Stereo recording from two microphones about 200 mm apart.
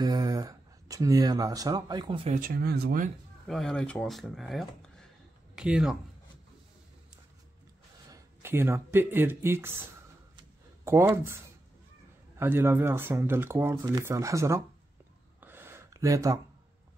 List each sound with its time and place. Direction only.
0.0 s speech: 20° right (ahead or behind)
2.3 s speech: 45° right (ahead or behind)
3.4 s speech: centre (ahead or behind)
8.1 s speech: 10° right (ahead or behind)
10.9 s speech: 15° right (ahead or behind)
15.4 s a sound: 10° right (ahead or behind)